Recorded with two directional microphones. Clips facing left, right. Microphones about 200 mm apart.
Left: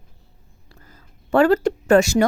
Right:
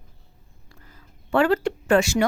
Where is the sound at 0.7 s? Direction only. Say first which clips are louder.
Left 2 dB; 40° left (ahead or behind).